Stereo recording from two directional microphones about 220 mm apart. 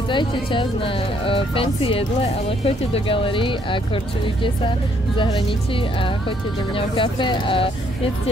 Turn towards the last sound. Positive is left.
turn(degrees=25)  # may be behind; listen again after turning